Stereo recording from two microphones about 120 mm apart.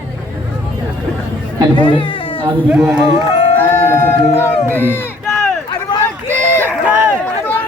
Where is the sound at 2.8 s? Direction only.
10° right (ahead or behind).